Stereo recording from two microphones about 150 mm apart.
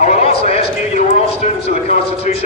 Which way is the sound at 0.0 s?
45° left (ahead or behind).